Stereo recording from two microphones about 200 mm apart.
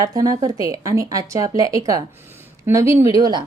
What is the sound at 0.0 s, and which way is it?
A woman's voice, 20° right (ahead or behind).